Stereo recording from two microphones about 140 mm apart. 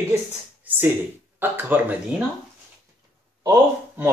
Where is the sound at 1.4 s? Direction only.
15° right (ahead or behind).